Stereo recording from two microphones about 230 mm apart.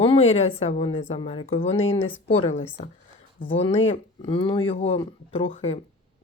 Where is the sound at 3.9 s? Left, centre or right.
Left.